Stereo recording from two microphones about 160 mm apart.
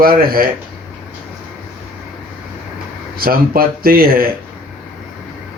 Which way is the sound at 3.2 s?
65° right (ahead or behind).